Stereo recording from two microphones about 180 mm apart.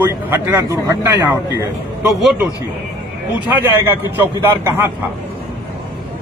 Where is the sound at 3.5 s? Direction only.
10° right (ahead or behind).